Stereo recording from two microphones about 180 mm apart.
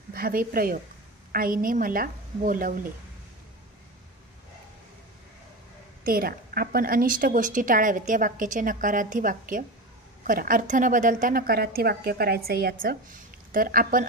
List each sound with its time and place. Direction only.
0.1 s a woman's voice: 55° right (ahead or behind)
6.0 s a woman's voice: 55° right (ahead or behind)